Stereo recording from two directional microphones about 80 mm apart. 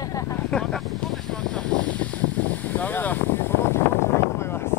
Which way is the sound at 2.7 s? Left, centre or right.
Left.